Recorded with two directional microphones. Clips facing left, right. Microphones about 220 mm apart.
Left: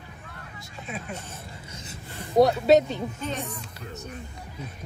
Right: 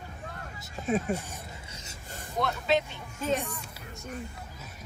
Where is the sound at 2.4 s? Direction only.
40° left (ahead or behind).